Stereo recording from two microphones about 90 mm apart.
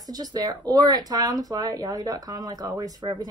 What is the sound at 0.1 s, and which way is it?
Speech, 45° right (ahead or behind).